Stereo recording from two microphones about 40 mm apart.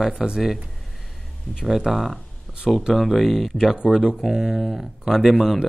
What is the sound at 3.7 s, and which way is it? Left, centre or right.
Speech, centre.